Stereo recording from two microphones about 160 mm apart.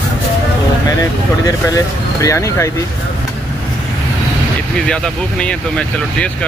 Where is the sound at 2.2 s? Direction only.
20° left (ahead or behind).